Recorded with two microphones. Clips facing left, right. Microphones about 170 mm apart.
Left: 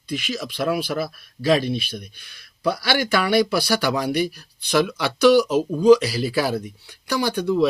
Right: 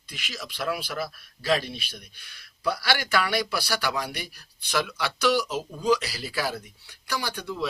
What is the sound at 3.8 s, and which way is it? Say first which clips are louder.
Speech: left 6 dB; 35° left (ahead or behind).